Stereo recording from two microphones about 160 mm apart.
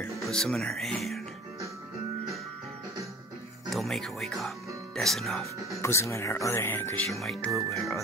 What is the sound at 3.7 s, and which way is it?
Speech, centre (ahead or behind).